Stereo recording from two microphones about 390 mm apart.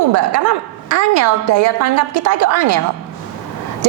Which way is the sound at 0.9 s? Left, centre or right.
Right.